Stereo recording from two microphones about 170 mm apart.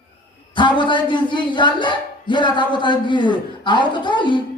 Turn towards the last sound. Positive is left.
turn(degrees=30)  # may be behind; listen again after turning